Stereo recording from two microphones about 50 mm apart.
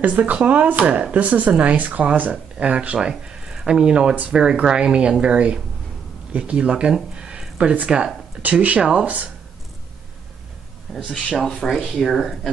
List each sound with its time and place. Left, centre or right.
0.0 s speech: right
8.4 s speech: right
10.9 s speech: centre